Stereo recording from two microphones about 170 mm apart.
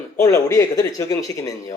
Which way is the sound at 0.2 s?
15° left (ahead or behind).